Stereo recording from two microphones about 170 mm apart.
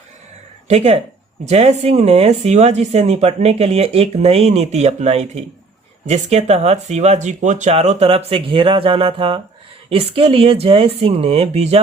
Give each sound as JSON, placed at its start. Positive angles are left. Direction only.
{"t": 0.7, "sound": "speech", "side_deg": -40}